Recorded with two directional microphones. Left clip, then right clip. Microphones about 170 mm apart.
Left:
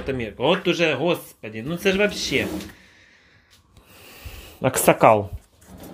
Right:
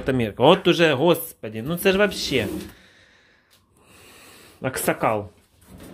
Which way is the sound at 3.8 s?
10° left (ahead or behind).